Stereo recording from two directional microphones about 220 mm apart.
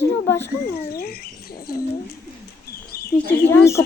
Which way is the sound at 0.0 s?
10° left (ahead or behind).